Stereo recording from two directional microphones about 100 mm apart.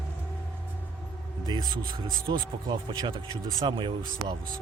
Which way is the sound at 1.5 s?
55° right (ahead or behind).